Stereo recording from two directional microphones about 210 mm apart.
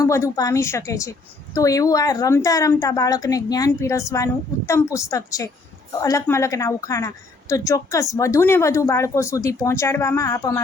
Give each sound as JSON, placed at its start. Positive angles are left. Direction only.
{"t": 0.3, "sound": "a woman's voice", "side_deg": 15}